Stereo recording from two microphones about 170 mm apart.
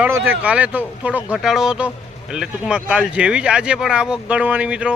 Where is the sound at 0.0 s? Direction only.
10° right (ahead or behind).